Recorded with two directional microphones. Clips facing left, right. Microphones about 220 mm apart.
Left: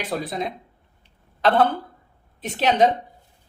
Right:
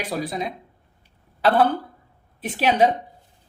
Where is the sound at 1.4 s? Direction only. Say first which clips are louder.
Even; 10° right (ahead or behind).